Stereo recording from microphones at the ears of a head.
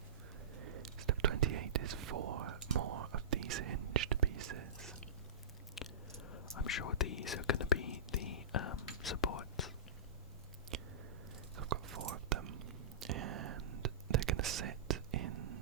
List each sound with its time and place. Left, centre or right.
0.5 s whispering: right
5.8 s whispering: left
11.5 s whispering: right